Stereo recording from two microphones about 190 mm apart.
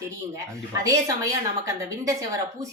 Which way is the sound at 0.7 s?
15° right (ahead or behind).